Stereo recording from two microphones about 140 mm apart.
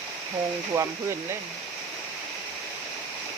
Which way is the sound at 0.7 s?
20° right (ahead or behind).